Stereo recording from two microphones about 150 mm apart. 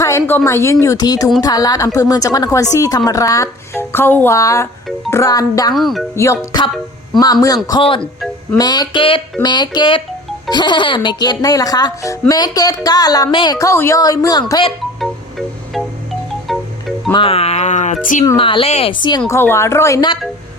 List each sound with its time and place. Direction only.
0.0 s speech: 20° left (ahead or behind)
5.7 s speech: centre (ahead or behind)
6.1 s speech: 20° left (ahead or behind)
15.0 s music: centre (ahead or behind)
17.1 s speech: 35° left (ahead or behind); by 18.3 s 55° left (ahead or behind)
18.3 s a woman's voice: 35° left (ahead or behind)
19.3 s speech: 15° left (ahead or behind)